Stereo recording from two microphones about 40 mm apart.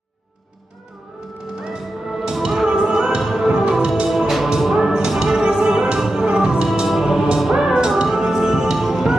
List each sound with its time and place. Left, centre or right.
1.6 s music: centre
3.7 s music: centre
4.1 s music: centre